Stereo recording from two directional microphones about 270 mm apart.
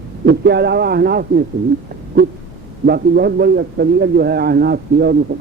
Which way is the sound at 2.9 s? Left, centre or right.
Right.